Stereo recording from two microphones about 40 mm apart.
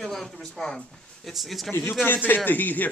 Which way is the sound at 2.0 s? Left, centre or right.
Left.